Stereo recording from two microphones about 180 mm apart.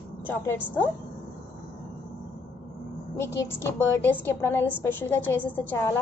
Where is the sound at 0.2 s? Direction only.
10° left (ahead or behind).